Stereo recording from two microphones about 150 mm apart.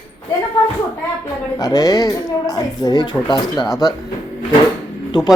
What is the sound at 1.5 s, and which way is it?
Speech, 25° left (ahead or behind).